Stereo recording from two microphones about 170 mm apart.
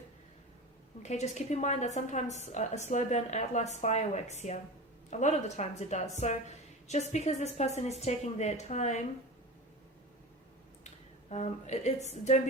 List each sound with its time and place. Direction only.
1.0 s a woman's voice: 40° left (ahead or behind)
11.3 s a woman's voice: 45° left (ahead or behind)